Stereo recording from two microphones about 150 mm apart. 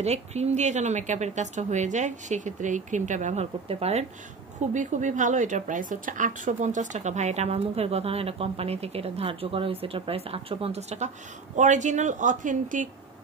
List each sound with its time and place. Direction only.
0.0 s speech: 45° right (ahead or behind)
4.7 s speech: 55° right (ahead or behind)